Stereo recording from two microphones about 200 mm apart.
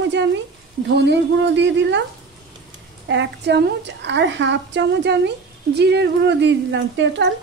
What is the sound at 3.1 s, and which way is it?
A woman's voice, 60° right (ahead or behind).